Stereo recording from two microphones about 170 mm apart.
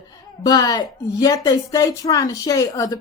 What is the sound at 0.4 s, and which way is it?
A woman's voice, 20° left (ahead or behind).